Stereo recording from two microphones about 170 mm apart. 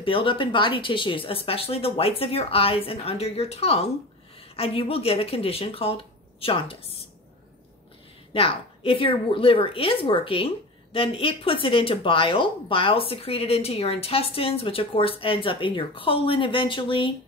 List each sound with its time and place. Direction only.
0.0 s a woman's voice: 30° left (ahead or behind)
8.3 s a woman's voice: 35° left (ahead or behind)